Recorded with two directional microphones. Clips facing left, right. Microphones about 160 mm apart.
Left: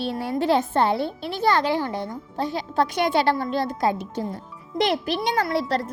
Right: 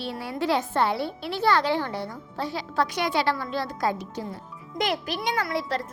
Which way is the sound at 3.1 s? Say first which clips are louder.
Left 4 dB; 55° left (ahead or behind).